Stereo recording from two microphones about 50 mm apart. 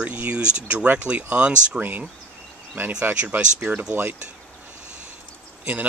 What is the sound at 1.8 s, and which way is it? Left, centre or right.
Speech, right.